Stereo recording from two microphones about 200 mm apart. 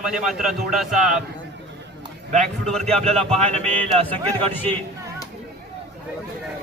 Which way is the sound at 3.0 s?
30° right (ahead or behind).